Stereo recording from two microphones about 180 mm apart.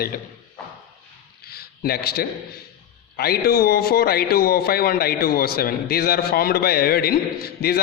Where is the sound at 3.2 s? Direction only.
60° left (ahead or behind).